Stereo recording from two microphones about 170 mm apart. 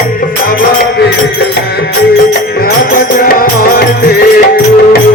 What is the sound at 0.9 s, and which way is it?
Music, 75° left (ahead or behind).